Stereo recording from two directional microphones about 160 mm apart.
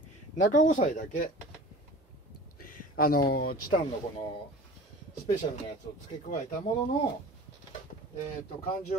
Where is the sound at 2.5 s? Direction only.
60° left (ahead or behind).